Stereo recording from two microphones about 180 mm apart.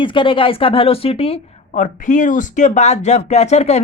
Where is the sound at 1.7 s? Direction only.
45° left (ahead or behind).